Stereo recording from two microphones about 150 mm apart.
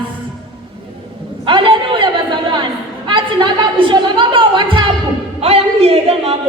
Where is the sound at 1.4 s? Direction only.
35° right (ahead or behind).